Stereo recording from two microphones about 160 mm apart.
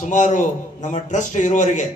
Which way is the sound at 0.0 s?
50° left (ahead or behind).